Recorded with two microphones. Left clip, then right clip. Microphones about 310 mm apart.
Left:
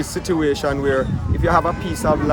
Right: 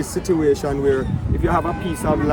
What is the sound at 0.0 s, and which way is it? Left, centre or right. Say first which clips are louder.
Speech: right 1 dB; centre.